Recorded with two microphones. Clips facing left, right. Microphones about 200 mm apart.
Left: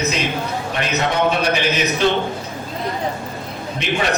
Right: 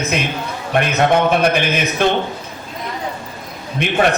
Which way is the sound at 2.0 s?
50° right (ahead or behind).